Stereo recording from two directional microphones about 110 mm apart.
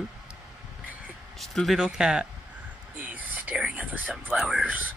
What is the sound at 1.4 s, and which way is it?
Speech, centre (ahead or behind).